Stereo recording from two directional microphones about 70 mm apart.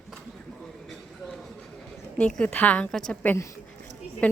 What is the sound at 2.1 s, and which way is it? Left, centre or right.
Speech, centre.